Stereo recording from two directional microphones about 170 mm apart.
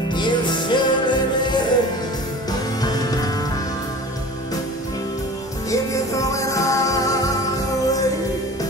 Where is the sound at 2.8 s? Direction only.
20° left (ahead or behind).